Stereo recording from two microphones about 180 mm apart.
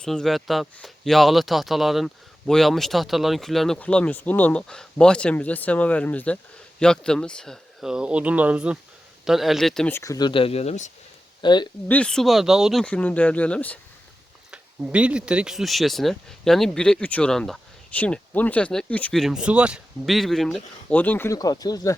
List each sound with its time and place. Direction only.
0.0 s speech: centre (ahead or behind)
10.0 s speech: 20° left (ahead or behind); by 10.9 s 40° left (ahead or behind)
11.4 s speech: 25° left (ahead or behind)
11.9 s speech: 5° left (ahead or behind)
14.5 s speech: 5° right (ahead or behind); by 21.9 s 20° left (ahead or behind)